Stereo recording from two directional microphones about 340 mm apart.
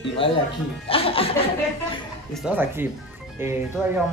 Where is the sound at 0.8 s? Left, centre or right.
Centre.